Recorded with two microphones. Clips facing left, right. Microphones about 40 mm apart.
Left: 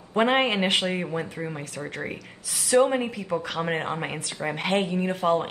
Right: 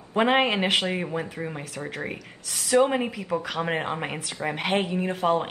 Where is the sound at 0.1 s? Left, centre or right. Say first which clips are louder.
Even; centre.